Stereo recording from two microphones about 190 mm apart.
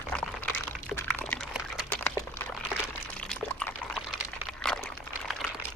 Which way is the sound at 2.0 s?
15° left (ahead or behind).